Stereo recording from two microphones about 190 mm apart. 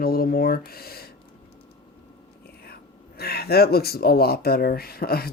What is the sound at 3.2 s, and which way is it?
Speech, 55° left (ahead or behind).